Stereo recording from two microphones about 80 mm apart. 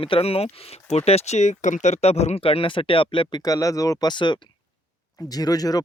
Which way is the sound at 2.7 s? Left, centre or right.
Left.